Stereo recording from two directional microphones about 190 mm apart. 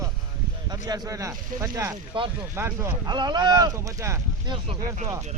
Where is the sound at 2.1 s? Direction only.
25° right (ahead or behind).